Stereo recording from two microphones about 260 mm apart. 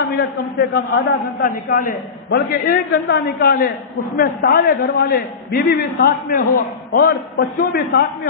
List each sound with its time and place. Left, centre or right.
0.6 s a man's voice: left